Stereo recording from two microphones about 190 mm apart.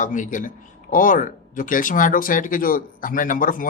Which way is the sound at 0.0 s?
40° left (ahead or behind).